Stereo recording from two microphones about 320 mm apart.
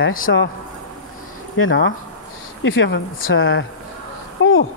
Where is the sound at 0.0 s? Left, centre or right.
Left.